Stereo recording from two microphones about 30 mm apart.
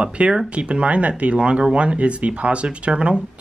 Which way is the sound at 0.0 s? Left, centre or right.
Right.